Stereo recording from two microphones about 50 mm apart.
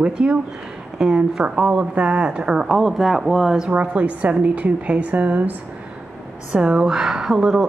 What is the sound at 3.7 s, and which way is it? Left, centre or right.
A woman's voice, right.